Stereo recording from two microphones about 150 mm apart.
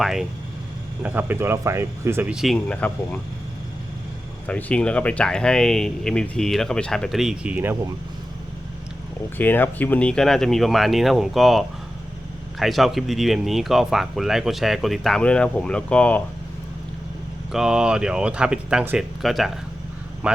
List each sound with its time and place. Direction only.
0.0 s speech: centre (ahead or behind)
1.0 s speech: 15° right (ahead or behind)
2.3 s speech: centre (ahead or behind)
4.4 s speech: 10° left (ahead or behind); by 7.9 s 15° right (ahead or behind)
9.4 s speech: 10° left (ahead or behind)
17.5 s speech: 5° right (ahead or behind)